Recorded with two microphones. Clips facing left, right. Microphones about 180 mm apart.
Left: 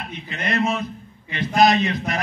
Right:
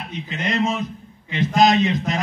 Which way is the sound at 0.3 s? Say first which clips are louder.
Even; 20° right (ahead or behind).